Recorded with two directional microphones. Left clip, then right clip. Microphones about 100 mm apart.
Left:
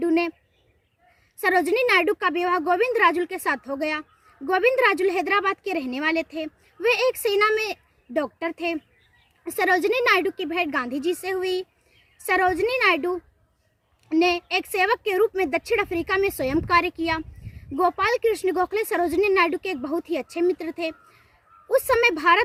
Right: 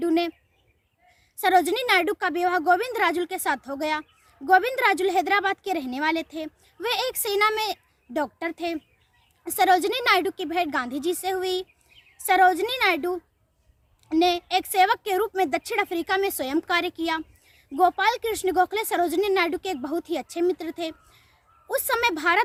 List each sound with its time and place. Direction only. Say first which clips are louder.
0.0 s bird: left 1 dB; 50° right (ahead or behind)
1.4 s speech: even; 50° right (ahead or behind)